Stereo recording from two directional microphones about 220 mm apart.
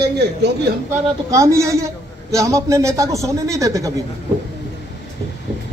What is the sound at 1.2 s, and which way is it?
A man's voice, 15° right (ahead or behind).